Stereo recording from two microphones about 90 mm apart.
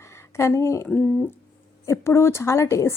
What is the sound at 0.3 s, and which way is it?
Speech, 30° left (ahead or behind).